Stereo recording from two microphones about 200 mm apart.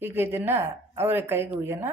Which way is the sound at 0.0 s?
10° right (ahead or behind).